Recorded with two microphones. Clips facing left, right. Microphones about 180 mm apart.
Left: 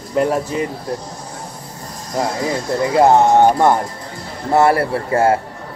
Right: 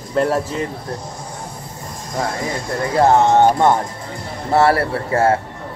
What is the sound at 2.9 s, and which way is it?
Speech, 15° left (ahead or behind).